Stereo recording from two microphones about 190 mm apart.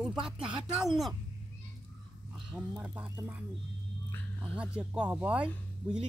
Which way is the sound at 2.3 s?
Centre (ahead or behind).